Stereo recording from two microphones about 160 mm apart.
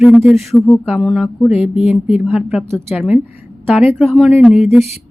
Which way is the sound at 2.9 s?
5° right (ahead or behind).